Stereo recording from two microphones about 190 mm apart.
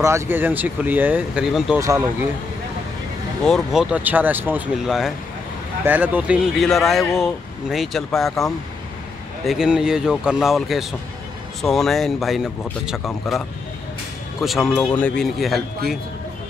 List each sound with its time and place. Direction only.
0.0 s speech: 10° right (ahead or behind)
1.8 s speech: 15° right (ahead or behind)
3.4 s speech: centre (ahead or behind)
14.4 s speech: centre (ahead or behind)